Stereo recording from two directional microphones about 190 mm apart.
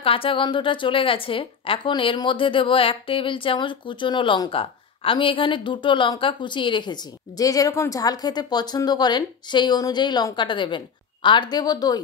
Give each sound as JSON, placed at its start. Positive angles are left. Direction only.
{"t": 0.0, "sound": "a woman's voice", "side_deg": 30}